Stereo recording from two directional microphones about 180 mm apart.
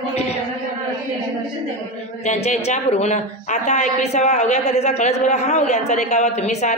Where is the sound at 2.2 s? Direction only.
40° left (ahead or behind).